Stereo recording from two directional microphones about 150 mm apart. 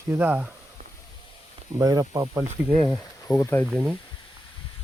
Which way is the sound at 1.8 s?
25° right (ahead or behind).